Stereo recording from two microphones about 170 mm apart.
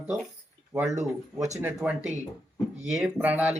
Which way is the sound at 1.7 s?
5° right (ahead or behind).